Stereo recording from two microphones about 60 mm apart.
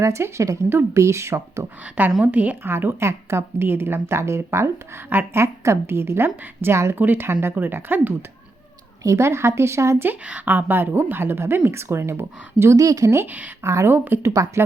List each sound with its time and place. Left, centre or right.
0.0 s a woman's voice: right
1.8 s a woman's voice: right
2.7 s a woman's voice: right
5.0 s a woman's voice: right
5.4 s a woman's voice: right
9.0 s a woman's voice: right
10.4 s a woman's voice: right
12.7 s speech: right
13.2 s a woman's voice: right
13.6 s a woman's voice: right
13.9 s a woman's voice: right
14.3 s speech: right